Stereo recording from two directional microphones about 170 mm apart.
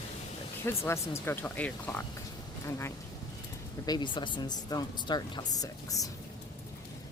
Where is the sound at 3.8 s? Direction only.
25° left (ahead or behind).